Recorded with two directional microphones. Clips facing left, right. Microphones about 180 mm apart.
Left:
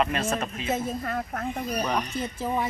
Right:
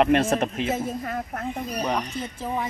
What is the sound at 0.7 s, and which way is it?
Speech, 10° right (ahead or behind).